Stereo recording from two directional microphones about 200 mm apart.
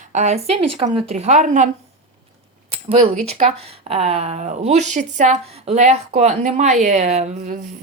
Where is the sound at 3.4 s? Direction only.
40° right (ahead or behind).